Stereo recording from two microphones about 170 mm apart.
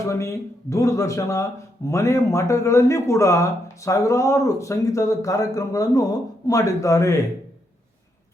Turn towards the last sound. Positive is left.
turn(degrees=20)  # may be behind; listen again after turning